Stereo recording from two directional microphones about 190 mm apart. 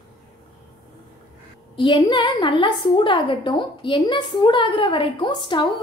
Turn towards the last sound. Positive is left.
turn(degrees=25)  # may be behind; listen again after turning